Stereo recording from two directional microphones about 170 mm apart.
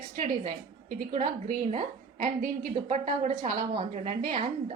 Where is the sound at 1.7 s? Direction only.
45° right (ahead or behind).